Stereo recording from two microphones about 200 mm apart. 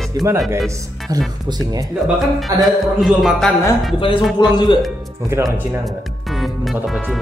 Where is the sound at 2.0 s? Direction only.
Centre (ahead or behind).